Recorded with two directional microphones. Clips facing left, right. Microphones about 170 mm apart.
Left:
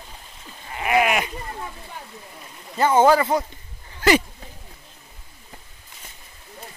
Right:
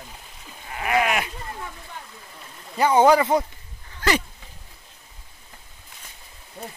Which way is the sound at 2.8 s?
15° right (ahead or behind).